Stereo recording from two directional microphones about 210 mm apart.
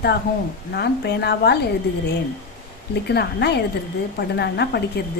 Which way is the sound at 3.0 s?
55° left (ahead or behind).